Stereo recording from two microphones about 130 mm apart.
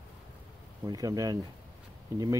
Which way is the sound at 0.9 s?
30° right (ahead or behind).